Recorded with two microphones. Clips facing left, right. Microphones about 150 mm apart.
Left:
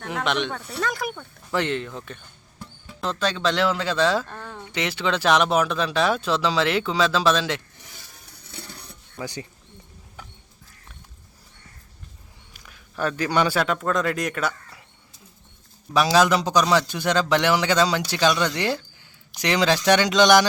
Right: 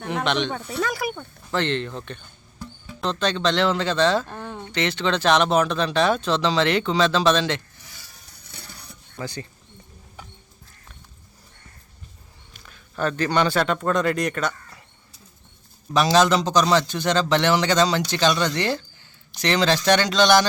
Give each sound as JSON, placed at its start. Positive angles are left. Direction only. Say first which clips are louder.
{"t": 0.0, "sound": "speech", "louder": "right 2 dB", "side_deg": 0}
{"t": 1.5, "sound": "speech", "louder": "right 1 dB", "side_deg": 10}
{"t": 4.3, "sound": "a sound", "louder": "right 3 dB", "side_deg": -15}
{"t": 4.6, "sound": "speech", "louder": "right 2 dB", "side_deg": 10}
{"t": 8.4, "sound": "a sound", "louder": "left 3 dB", "side_deg": 25}
{"t": 9.2, "sound": "a man's voice", "louder": "even", "side_deg": 15}
{"t": 12.5, "sound": "a man's voice", "louder": "right 1 dB", "side_deg": 10}
{"t": 15.9, "sound": "a man's voice", "louder": "right 1 dB", "side_deg": 5}